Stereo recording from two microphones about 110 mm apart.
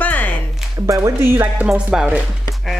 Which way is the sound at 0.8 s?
30° right (ahead or behind).